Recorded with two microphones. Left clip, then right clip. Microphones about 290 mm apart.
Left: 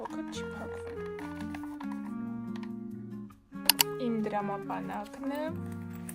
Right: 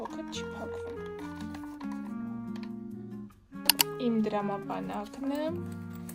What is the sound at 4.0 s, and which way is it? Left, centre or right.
Music, centre.